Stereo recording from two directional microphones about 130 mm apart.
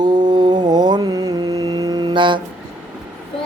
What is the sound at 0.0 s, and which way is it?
Mantra, 35° right (ahead or behind).